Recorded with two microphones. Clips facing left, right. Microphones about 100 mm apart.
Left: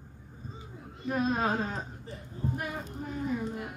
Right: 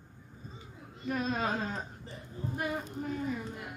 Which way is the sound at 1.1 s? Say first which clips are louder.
Left 4 dB; 30° left (ahead or behind).